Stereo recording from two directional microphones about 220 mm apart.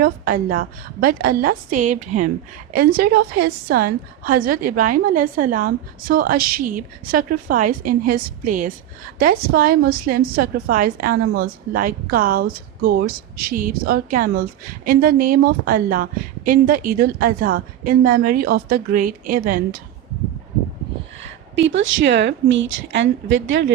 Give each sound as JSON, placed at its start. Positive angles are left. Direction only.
{"t": 0.0, "sound": "a woman's voice", "side_deg": -40}
{"t": 21.5, "sound": "a woman's voice", "side_deg": -55}